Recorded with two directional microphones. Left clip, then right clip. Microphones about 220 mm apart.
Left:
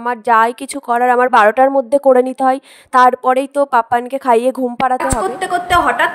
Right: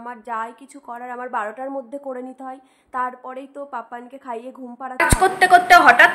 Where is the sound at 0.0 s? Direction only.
45° left (ahead or behind).